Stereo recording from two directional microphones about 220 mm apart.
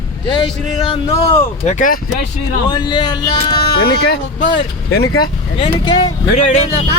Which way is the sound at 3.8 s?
45° left (ahead or behind).